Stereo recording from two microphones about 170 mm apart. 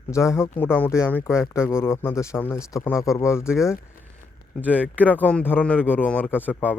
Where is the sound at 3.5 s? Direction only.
5° right (ahead or behind).